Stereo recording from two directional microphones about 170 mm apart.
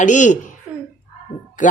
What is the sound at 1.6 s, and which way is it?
Speech, 45° left (ahead or behind).